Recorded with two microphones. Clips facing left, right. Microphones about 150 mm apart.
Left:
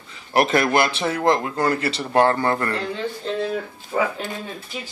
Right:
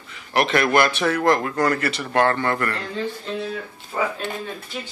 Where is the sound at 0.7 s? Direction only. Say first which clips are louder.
Right 1 dB; 25° left (ahead or behind).